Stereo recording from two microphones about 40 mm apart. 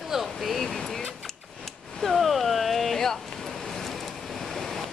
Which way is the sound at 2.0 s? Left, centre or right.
Centre.